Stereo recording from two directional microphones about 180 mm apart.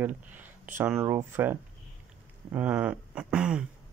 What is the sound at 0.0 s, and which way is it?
Speech, 10° right (ahead or behind).